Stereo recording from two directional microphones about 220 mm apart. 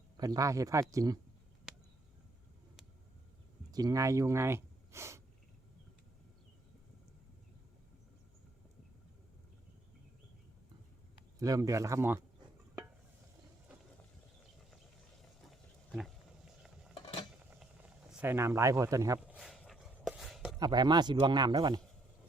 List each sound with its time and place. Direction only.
0.2 s speech: 15° right (ahead or behind)
1.7 s a sound: centre (ahead or behind)
3.7 s speech: 15° right (ahead or behind)
11.3 s speech: 15° right (ahead or behind)
15.4 s a sound: centre (ahead or behind)
16.9 s cutlery: 20° left (ahead or behind)
17.4 s a sound: 5° right (ahead or behind)
19.4 s chopping: centre (ahead or behind)
20.6 s speech: 20° right (ahead or behind)